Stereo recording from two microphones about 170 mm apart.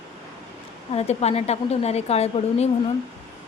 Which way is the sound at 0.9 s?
40° left (ahead or behind).